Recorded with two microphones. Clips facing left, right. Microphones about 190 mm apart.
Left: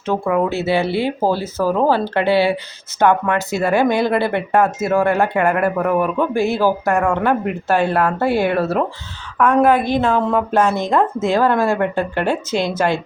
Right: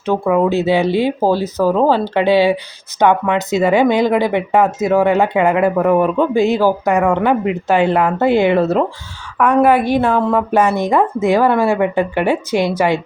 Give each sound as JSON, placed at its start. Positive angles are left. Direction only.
{"t": 0.0, "sound": "speech", "side_deg": -15}